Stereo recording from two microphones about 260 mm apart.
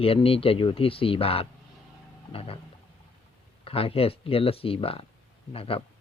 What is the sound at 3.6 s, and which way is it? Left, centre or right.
Speech, left.